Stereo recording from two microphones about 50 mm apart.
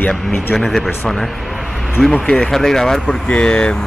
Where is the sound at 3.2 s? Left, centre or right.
Centre.